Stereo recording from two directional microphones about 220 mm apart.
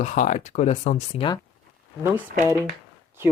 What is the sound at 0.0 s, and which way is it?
Speech, 35° left (ahead or behind).